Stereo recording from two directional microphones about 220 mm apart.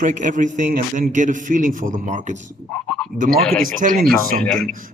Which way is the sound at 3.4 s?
Centre (ahead or behind).